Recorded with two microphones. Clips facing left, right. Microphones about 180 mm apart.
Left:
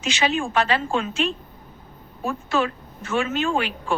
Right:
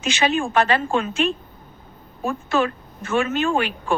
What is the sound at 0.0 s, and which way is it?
A woman's voice, 55° right (ahead or behind).